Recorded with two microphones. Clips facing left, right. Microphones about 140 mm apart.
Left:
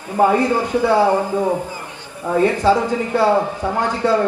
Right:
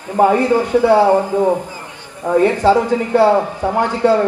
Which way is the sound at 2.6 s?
15° right (ahead or behind).